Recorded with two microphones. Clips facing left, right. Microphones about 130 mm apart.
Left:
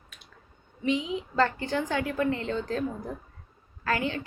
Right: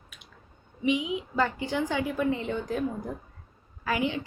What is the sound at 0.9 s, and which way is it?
A woman's voice, 15° right (ahead or behind).